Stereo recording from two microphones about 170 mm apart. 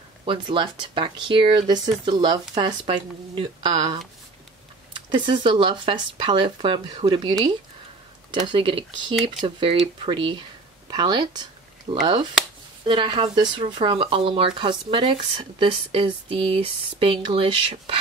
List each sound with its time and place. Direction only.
0.2 s speech: 30° right (ahead or behind)
8.5 s speech: 30° right (ahead or behind)